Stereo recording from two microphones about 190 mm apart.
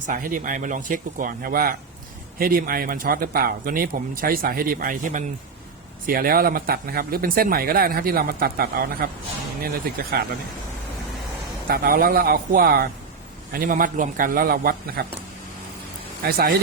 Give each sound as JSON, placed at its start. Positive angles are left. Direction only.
{"t": 0.0, "sound": "speech", "side_deg": -45}
{"t": 11.7, "sound": "speech", "side_deg": -50}
{"t": 16.2, "sound": "speech", "side_deg": -50}